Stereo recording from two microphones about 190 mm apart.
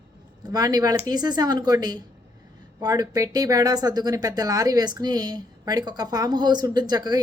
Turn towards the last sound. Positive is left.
turn(degrees=-20)  # may be behind; listen again after turning